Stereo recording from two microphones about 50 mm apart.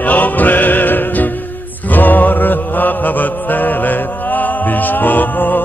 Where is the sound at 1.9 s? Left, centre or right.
Left.